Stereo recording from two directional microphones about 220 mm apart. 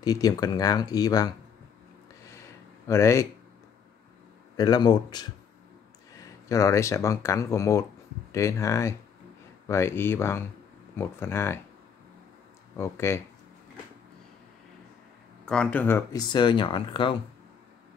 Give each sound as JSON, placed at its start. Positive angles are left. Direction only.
{"t": 0.0, "sound": "speech", "side_deg": 15}
{"t": 2.9, "sound": "speech", "side_deg": 15}
{"t": 4.6, "sound": "speech", "side_deg": 20}
{"t": 12.7, "sound": "speech", "side_deg": 10}
{"t": 15.4, "sound": "speech", "side_deg": 5}